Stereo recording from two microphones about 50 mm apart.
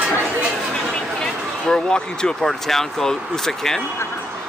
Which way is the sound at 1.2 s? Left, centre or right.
Centre.